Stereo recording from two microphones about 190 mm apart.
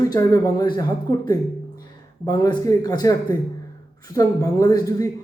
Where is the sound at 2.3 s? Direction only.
20° left (ahead or behind).